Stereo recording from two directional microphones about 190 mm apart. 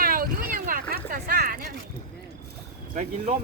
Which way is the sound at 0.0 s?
50° right (ahead or behind).